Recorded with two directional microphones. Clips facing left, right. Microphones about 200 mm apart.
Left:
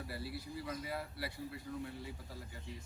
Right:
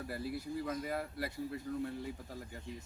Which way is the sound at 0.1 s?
45° right (ahead or behind).